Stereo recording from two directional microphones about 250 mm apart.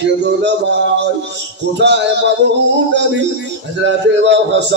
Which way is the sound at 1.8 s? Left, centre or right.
Right.